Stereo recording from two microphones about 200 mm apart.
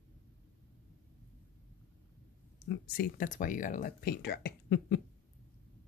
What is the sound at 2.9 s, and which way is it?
Speech, 40° left (ahead or behind).